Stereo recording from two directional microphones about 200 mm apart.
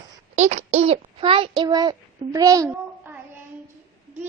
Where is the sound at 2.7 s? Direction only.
10° right (ahead or behind).